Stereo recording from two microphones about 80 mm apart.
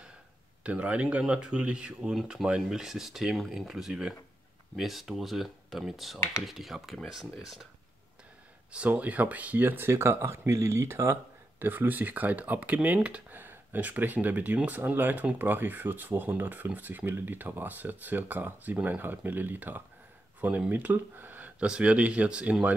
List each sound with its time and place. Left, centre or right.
0.7 s speech: centre
6.1 s speech: left
6.4 s speech: centre
8.7 s speech: centre; by 11.1 s right
11.6 s speech: right